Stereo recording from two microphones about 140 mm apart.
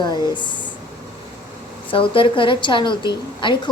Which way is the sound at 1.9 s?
40° left (ahead or behind).